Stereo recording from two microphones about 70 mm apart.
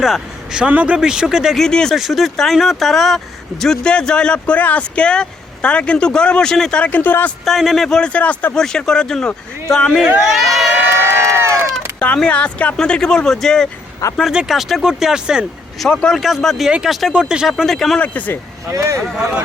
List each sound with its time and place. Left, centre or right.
0.0 s speech: centre
0.7 s a man's voice: right
0.9 s speech: centre
1.5 s speech: centre
2.0 s speech: centre; by 7.3 s left
7.4 s speech: centre; by 8.5 s left
8.5 s speech: centre
10.9 s crowd: right
11.9 s speech: centre
14.0 s speech: left
14.3 s speech: centre
15.8 s speech: centre
18.0 s speech: left
18.7 s speech: right